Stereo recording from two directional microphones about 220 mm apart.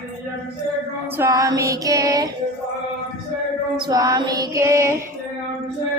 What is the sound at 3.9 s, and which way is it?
Female singing, 15° right (ahead or behind).